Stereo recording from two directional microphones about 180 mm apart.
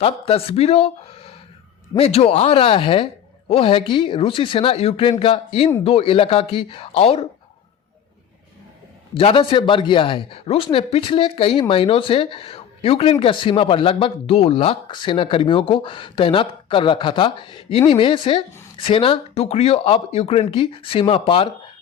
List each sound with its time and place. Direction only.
0.0 s speech: 35° left (ahead or behind)
9.1 s speech: 30° left (ahead or behind)